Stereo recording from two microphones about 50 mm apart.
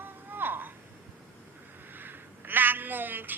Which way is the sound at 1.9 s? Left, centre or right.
Right.